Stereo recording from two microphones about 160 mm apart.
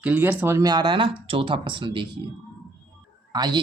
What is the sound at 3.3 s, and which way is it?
Speech, 25° right (ahead or behind).